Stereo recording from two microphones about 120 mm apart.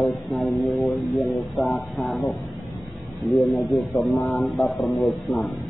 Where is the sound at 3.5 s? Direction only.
25° left (ahead or behind).